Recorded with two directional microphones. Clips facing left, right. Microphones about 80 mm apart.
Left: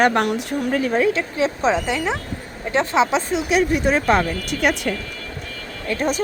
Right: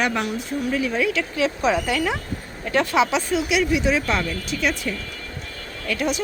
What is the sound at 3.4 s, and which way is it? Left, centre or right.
Speech, left.